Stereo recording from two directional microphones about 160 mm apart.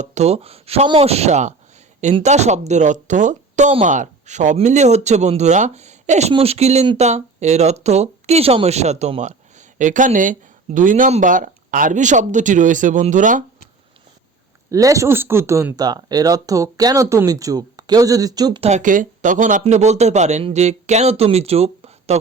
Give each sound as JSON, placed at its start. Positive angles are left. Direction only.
{"t": 0.0, "sound": "speech", "side_deg": -45}
{"t": 14.7, "sound": "speech", "side_deg": -20}
{"t": 18.6, "sound": "speech", "side_deg": -50}